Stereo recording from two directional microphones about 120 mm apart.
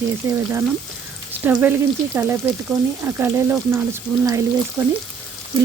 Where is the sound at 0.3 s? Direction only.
20° right (ahead or behind).